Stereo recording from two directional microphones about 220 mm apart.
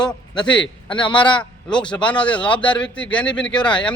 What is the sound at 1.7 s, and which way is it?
A man's voice, 5° left (ahead or behind).